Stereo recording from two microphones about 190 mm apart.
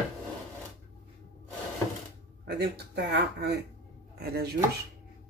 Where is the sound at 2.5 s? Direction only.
60° right (ahead or behind).